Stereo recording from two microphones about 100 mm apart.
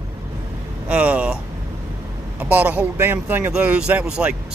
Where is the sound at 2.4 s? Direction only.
15° right (ahead or behind).